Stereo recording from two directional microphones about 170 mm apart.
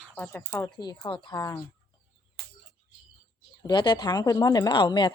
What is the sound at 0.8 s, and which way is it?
Speech, 25° left (ahead or behind).